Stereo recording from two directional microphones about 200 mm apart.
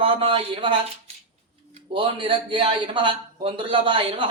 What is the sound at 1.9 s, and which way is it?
Speech, 25° right (ahead or behind).